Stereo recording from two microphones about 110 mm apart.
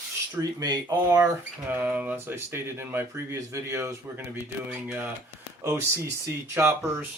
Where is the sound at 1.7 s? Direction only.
15° right (ahead or behind).